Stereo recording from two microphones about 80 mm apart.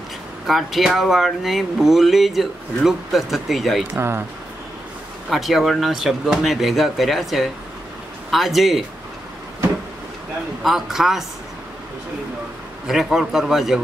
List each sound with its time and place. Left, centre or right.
0.5 s speech: centre
3.9 s speech: right
5.3 s speech: centre
10.6 s speech: centre
12.8 s speech: centre